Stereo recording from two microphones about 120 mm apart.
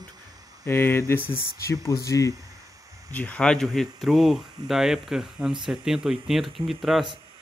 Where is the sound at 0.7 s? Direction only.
20° left (ahead or behind).